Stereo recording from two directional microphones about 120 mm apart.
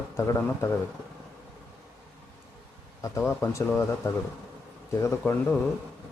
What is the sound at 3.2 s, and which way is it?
Speech, 10° left (ahead or behind).